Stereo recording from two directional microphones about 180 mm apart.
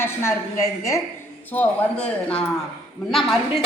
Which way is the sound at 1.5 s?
10° left (ahead or behind).